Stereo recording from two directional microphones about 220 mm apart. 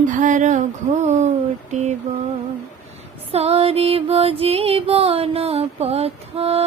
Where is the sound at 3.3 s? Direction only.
30° right (ahead or behind).